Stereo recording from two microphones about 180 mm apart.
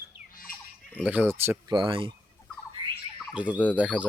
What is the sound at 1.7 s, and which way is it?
Fowl, 30° right (ahead or behind).